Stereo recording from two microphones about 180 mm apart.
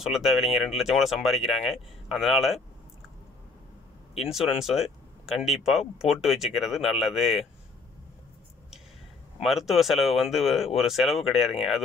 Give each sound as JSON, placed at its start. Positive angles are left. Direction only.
{"t": 0.0, "sound": "speech", "side_deg": 0}
{"t": 4.2, "sound": "speech", "side_deg": 0}
{"t": 9.4, "sound": "speech", "side_deg": 0}